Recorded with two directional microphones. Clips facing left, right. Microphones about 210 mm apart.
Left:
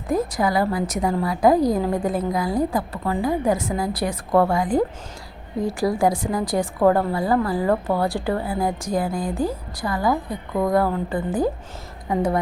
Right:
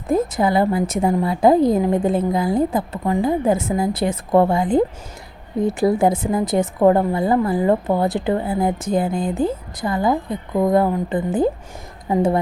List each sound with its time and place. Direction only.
0.1 s a woman's voice: 25° right (ahead or behind)